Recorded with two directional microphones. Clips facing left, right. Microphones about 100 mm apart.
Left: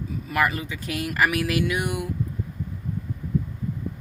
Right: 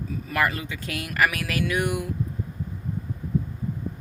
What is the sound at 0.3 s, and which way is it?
Speech, 15° left (ahead or behind).